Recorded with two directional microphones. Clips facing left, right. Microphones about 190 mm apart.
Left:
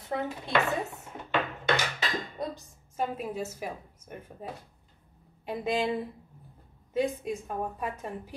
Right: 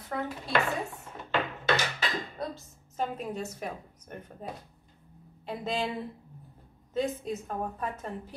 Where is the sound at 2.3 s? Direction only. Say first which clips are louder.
Left 1 dB; 15° left (ahead or behind).